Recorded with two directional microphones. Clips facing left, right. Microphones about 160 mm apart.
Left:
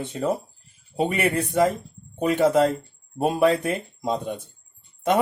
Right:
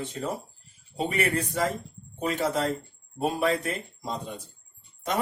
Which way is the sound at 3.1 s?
55° left (ahead or behind).